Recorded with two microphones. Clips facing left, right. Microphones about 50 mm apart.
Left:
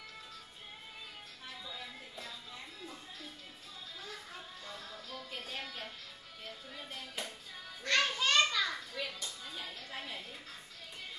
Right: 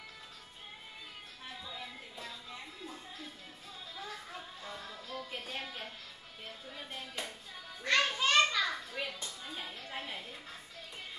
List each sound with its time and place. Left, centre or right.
1.7 s music: centre
4.6 s music: centre
7.8 s children playing: centre